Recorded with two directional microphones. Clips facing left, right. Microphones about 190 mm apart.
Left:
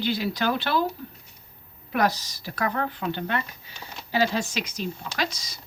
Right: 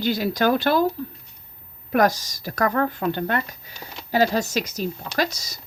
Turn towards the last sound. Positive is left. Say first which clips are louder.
# right 5 dB
turn(degrees=-40)  # may be behind; listen again after turning